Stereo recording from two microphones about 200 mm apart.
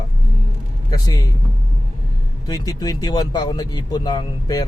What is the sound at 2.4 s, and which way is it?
Speech, 20° left (ahead or behind).